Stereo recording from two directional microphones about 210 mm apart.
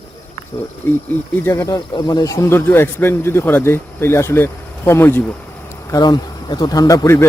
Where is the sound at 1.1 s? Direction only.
15° left (ahead or behind).